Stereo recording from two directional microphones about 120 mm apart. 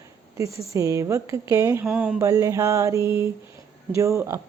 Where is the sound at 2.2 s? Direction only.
30° right (ahead or behind).